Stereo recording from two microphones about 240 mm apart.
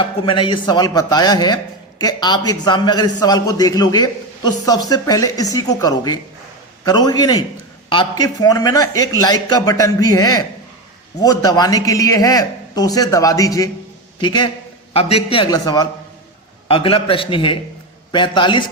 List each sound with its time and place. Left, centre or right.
0.0 s a man's voice: left